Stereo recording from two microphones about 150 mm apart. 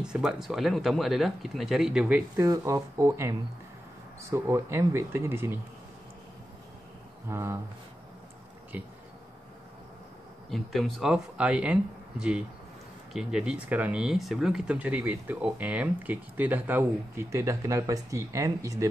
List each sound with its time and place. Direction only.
0.0 s speech: 5° right (ahead or behind)
2.4 s speech: 20° right (ahead or behind)
7.2 s speech: 20° right (ahead or behind)
8.7 s speech: 10° right (ahead or behind)
10.5 s speech: centre (ahead or behind); by 18.9 s 20° right (ahead or behind)